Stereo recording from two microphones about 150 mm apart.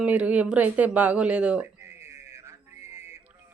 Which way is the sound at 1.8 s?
20° right (ahead or behind).